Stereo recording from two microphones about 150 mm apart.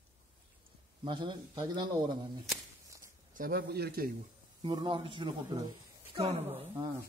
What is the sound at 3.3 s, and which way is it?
Speech, 80° right.